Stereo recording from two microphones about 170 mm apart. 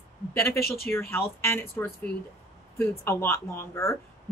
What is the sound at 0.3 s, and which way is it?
Speech, 15° left (ahead or behind).